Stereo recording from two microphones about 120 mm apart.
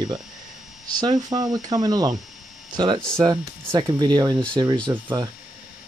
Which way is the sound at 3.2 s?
35° right (ahead or behind).